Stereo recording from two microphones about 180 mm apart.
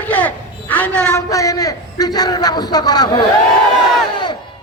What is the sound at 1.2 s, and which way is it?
A man's voice, 20° left (ahead or behind).